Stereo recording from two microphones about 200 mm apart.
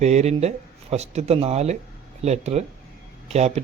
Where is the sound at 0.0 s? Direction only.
35° right (ahead or behind).